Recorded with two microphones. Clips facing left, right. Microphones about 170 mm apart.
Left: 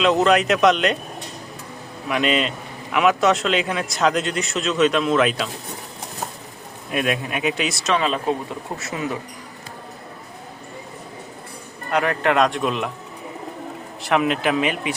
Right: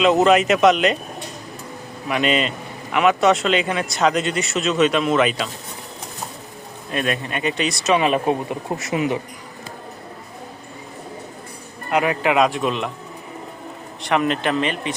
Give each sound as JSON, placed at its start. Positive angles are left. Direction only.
{"t": 0.0, "sound": "a man's voice", "side_deg": -5}
{"t": 2.0, "sound": "a man's voice", "side_deg": 0}
{"t": 6.9, "sound": "a man's voice", "side_deg": 5}
{"t": 7.9, "sound": "speech", "side_deg": -15}
{"t": 11.9, "sound": "a man's voice", "side_deg": -5}
{"t": 14.0, "sound": "a man's voice", "side_deg": 5}